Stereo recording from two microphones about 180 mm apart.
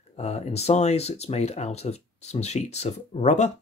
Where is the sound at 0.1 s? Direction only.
35° left (ahead or behind).